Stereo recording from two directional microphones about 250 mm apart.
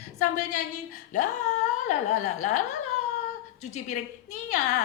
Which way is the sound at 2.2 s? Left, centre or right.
Left.